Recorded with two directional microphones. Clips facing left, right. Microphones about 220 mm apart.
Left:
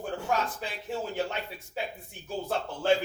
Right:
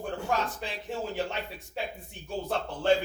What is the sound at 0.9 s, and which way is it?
A man's voice, centre (ahead or behind).